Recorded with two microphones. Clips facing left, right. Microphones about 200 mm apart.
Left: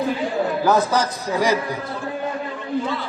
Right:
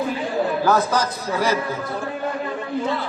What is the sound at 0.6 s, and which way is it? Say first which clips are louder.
Speech: left 2 dB; 15° left (ahead or behind).